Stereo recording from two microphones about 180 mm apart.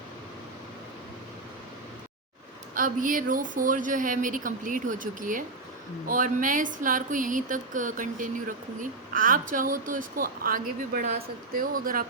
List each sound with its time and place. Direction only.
2.7 s speech: 50° right (ahead or behind)